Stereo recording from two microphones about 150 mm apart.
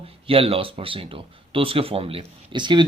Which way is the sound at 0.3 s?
40° right (ahead or behind).